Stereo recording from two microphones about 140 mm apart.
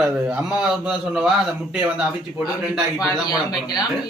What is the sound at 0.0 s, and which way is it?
Speech, 5° right (ahead or behind).